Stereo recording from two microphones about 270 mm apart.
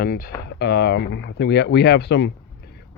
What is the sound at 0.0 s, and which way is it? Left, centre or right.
Speech, left.